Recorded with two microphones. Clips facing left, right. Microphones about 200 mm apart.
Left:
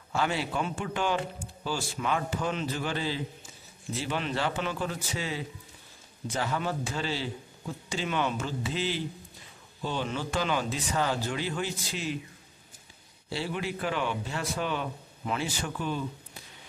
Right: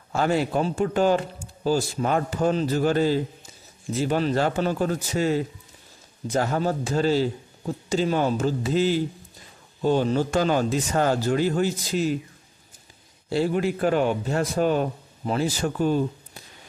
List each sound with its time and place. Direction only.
0.1 s a man's voice: 45° right (ahead or behind)
13.3 s a man's voice: 45° right (ahead or behind)